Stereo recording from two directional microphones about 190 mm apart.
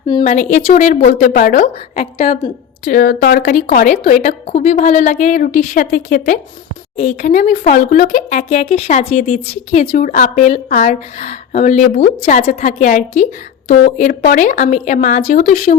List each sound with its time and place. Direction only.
0.3 s a woman's voice: 40° left (ahead or behind)
1.2 s a woman's voice: 50° left (ahead or behind)
2.8 s a woman's voice: 45° left (ahead or behind)